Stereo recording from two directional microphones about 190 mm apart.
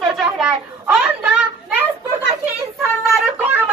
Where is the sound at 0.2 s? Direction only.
5° right (ahead or behind).